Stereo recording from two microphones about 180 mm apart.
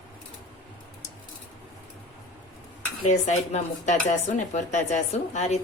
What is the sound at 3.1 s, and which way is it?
A woman's voice, 40° left (ahead or behind).